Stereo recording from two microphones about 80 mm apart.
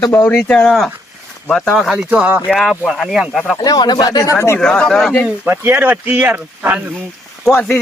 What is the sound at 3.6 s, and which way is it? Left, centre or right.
Speech, left.